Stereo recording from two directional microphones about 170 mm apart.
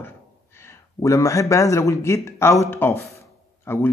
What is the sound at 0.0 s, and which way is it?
Speech, 15° left (ahead or behind).